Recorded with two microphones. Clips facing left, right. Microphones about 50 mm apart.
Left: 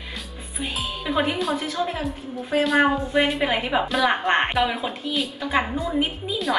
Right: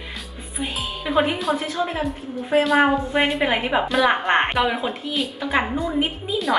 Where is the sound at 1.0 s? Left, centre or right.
Centre.